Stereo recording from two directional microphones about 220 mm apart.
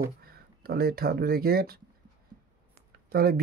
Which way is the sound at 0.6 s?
45° right (ahead or behind).